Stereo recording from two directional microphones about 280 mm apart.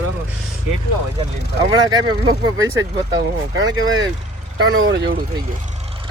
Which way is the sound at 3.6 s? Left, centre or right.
Right.